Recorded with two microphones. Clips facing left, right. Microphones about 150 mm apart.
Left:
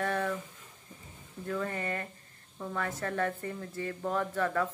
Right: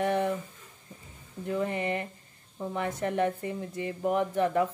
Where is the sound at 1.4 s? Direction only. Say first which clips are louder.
Right 4 dB; 20° right (ahead or behind).